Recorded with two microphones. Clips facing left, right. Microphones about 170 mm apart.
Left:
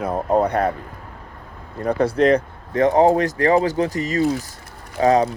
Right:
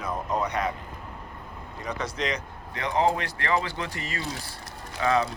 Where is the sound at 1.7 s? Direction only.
55° left (ahead or behind).